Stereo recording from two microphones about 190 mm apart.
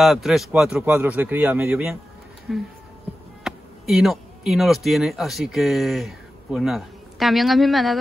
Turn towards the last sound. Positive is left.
turn(degrees=0)  # may be behind; listen again after turning